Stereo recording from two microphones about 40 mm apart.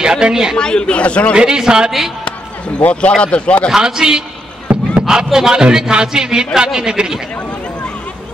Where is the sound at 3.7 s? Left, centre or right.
Centre.